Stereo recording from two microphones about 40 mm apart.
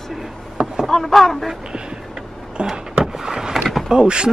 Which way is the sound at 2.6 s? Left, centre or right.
Right.